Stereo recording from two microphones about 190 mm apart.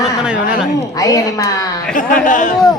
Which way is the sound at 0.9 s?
20° left (ahead or behind).